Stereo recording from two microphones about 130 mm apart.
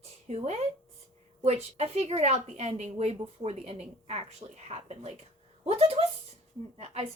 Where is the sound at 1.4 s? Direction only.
55° right (ahead or behind).